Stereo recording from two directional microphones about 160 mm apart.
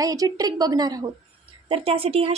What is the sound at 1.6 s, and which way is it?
Speech, 35° right (ahead or behind).